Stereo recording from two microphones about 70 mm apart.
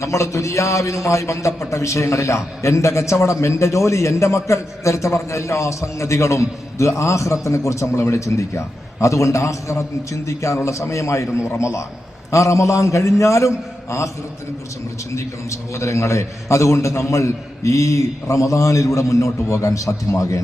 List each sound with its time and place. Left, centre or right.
0.0 s a man's voice: left
15.1 s a man's voice: left